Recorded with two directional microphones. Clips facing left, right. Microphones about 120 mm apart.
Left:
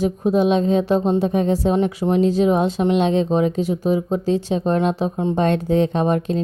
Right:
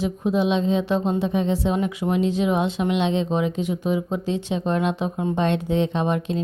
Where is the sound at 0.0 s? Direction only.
45° left (ahead or behind).